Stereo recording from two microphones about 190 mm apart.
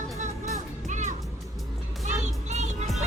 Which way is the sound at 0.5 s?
40° right (ahead or behind).